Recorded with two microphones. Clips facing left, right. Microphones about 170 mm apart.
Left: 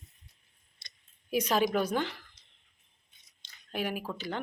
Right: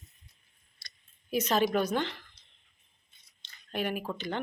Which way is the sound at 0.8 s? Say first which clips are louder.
Right 2 dB; 25° left (ahead or behind).